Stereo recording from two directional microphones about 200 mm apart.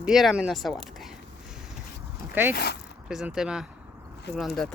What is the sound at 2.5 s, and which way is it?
Speech, 55° left (ahead or behind).